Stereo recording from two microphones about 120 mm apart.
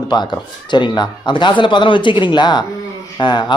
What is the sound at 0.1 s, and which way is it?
A woman's voice, 35° left (ahead or behind).